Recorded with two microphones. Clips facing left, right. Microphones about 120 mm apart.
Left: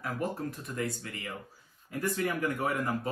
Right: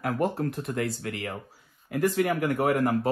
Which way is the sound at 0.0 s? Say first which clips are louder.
Right 7 dB; 80° right.